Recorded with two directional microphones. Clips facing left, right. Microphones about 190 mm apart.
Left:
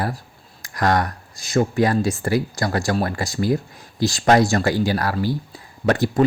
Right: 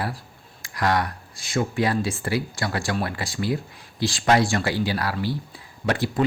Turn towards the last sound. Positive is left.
turn(degrees=45)  # may be behind; listen again after turning